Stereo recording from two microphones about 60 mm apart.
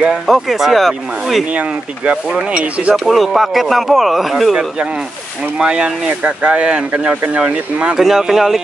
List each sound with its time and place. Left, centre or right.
0.3 s speech: centre
1.5 s speech: right
2.2 s speech: centre
2.5 s speech: right
3.0 s speech: centre
4.6 s speech: centre